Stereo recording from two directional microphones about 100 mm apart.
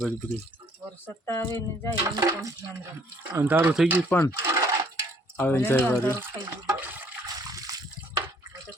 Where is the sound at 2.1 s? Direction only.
35° right (ahead or behind).